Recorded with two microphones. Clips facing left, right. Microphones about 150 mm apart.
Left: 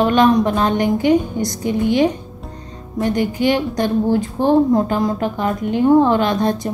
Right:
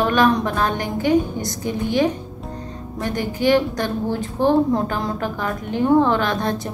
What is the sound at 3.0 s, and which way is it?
Speech, 15° left (ahead or behind).